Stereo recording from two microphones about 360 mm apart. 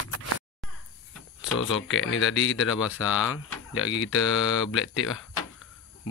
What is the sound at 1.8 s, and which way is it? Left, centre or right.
A man's voice, left.